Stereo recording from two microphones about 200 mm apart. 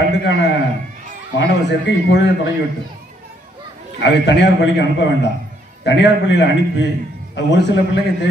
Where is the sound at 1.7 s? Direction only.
60° left (ahead or behind).